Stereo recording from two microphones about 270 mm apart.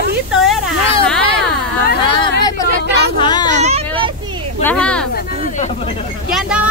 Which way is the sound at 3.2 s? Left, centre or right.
Centre.